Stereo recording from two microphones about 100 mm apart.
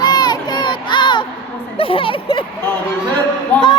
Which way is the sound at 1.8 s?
65° left (ahead or behind).